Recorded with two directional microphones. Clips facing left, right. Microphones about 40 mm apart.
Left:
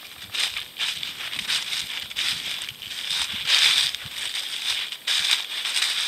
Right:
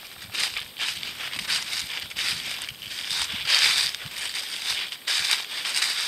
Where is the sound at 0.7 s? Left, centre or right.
Centre.